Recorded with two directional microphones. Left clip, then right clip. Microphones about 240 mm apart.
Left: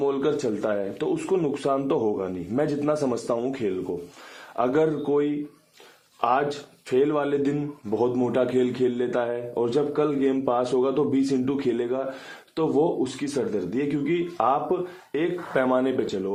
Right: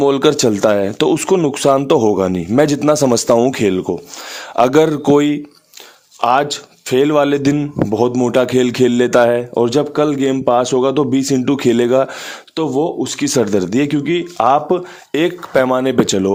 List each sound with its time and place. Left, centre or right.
0.0 s a man's voice: right
6.9 s a man's voice: right
15.6 s speech: right